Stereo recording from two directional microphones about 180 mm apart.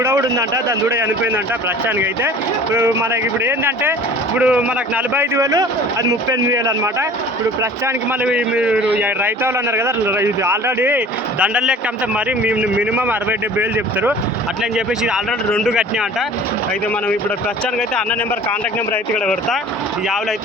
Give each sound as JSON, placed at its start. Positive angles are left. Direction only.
{"t": 0.0, "sound": "a man's voice", "side_deg": -15}
{"t": 2.7, "sound": "a man's voice", "side_deg": -15}
{"t": 8.2, "sound": "a man's voice", "side_deg": -5}
{"t": 15.0, "sound": "speech", "side_deg": 0}